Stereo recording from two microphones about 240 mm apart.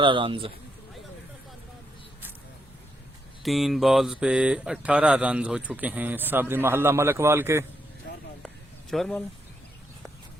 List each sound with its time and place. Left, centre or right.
0.0 s a man's voice: centre
3.4 s speech: centre
8.9 s speech: centre